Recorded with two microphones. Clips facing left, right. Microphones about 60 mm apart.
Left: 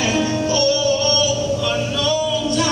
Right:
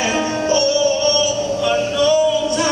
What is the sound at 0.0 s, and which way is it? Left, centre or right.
Music, right.